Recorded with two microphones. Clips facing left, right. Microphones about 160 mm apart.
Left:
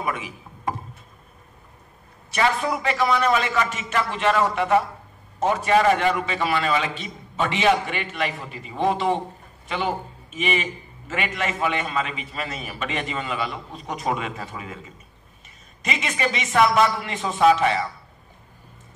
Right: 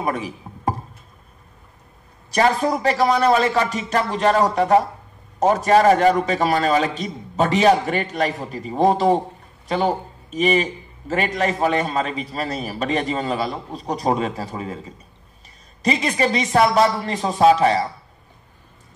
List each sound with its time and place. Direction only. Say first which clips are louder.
0.0 s speech: right 4 dB; 35° right (ahead or behind)
2.3 s a man's voice: right 4 dB; 40° right (ahead or behind)